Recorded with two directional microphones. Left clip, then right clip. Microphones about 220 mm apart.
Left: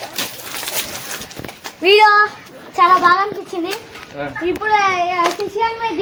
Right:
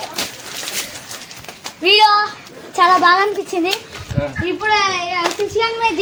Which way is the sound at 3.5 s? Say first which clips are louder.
Right 4 dB; 25° right (ahead or behind).